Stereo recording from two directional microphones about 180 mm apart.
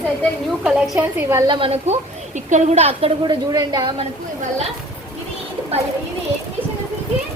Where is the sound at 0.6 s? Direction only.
5° right (ahead or behind).